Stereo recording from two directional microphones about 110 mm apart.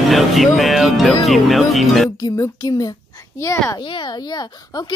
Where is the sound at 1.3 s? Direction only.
Centre (ahead or behind).